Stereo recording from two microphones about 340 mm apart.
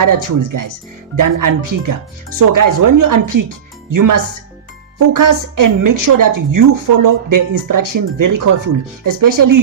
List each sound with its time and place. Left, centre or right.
0.0 s a woman's voice: right